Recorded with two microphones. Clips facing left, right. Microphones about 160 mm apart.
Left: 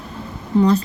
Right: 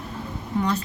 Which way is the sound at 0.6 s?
35° left (ahead or behind).